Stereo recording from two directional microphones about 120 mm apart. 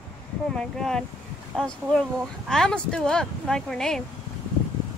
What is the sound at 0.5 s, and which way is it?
Speech, 5° left (ahead or behind).